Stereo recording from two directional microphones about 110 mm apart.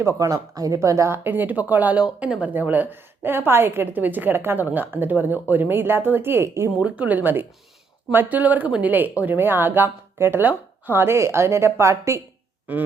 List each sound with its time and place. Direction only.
0.0 s speech: 30° right (ahead or behind)
6.7 s speech: 10° right (ahead or behind); by 12.2 s 25° right (ahead or behind)
12.7 s speech: 15° right (ahead or behind)